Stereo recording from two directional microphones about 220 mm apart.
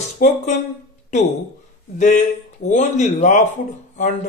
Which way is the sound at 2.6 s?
35° left (ahead or behind).